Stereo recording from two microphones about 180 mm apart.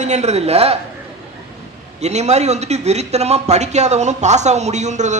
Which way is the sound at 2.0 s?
40° right (ahead or behind).